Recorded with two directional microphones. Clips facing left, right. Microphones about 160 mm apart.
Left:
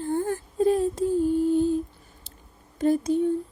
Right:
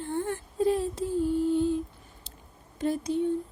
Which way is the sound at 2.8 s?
45° left (ahead or behind).